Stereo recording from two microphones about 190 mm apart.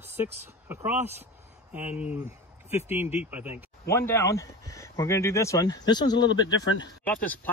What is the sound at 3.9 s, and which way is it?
Speech, 15° left (ahead or behind).